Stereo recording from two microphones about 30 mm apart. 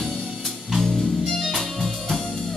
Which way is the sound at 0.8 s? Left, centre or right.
Centre.